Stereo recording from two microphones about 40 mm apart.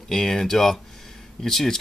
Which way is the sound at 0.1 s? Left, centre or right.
Centre.